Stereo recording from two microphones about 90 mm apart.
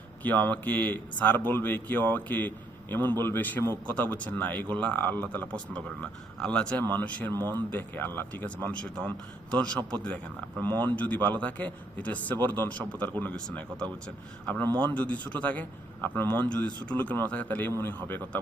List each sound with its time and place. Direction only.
0.2 s a man's voice: 20° left (ahead or behind)